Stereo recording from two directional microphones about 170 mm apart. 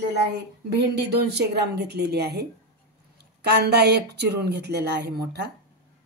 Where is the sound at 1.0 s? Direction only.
75° right (ahead or behind).